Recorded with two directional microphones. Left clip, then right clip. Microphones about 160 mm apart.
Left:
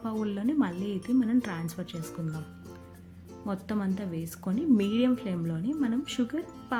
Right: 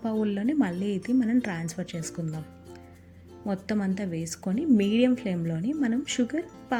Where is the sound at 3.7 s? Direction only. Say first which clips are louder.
Right 3 dB; 15° right (ahead or behind).